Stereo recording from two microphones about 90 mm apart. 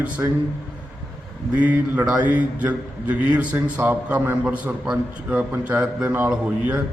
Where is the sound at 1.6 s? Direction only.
15° right (ahead or behind).